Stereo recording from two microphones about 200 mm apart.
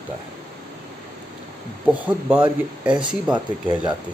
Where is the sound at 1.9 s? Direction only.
5° right (ahead or behind).